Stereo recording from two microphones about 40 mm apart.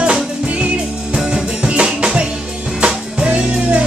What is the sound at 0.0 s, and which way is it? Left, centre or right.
Music, right.